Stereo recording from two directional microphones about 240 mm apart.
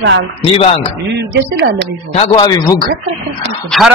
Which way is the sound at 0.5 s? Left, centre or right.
Left.